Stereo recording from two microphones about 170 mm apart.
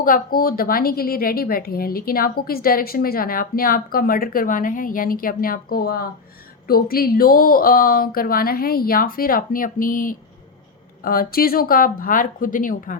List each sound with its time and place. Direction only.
0.0 s a woman's voice: 55° left (ahead or behind)